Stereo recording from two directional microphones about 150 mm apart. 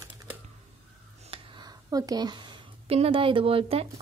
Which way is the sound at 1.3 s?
30° right (ahead or behind).